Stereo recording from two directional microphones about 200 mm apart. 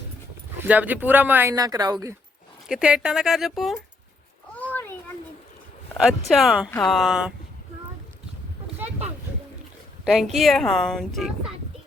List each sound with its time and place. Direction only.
0.7 s speech: 10° right (ahead or behind)
2.6 s speech: 5° right (ahead or behind)
4.5 s a sound: 10° left (ahead or behind)
6.2 s speech: centre (ahead or behind)
10.0 s speech: centre (ahead or behind)